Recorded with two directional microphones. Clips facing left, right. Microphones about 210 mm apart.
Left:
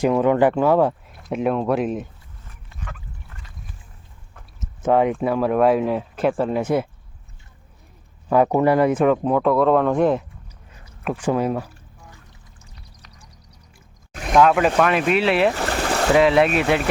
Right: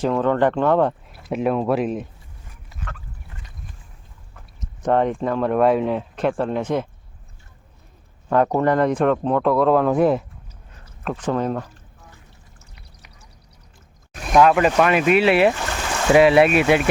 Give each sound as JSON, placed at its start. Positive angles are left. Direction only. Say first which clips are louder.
{"t": 0.0, "sound": "speech", "louder": "left 2 dB", "side_deg": 10}
{"t": 4.6, "sound": "speech", "louder": "left 1 dB", "side_deg": 5}
{"t": 8.3, "sound": "speech", "louder": "left 2 dB", "side_deg": 10}
{"t": 10.8, "sound": "a sound", "louder": "left 2 dB", "side_deg": 10}
{"t": 14.3, "sound": "speech", "louder": "right 1 dB", "side_deg": 0}
{"t": 15.5, "sound": "a sound", "louder": "left 4 dB", "side_deg": 35}
{"t": 16.1, "sound": "speech", "louder": "right 3 dB", "side_deg": -10}